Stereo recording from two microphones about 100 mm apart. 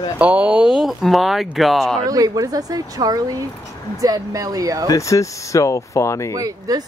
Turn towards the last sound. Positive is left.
turn(degrees=-35)  # may be behind; listen again after turning